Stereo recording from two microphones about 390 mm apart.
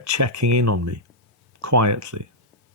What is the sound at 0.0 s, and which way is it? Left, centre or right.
Speech, right.